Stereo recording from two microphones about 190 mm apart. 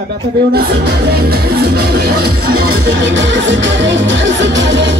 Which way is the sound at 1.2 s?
55° right (ahead or behind).